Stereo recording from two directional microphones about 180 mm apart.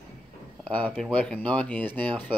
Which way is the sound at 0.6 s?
5° left (ahead or behind).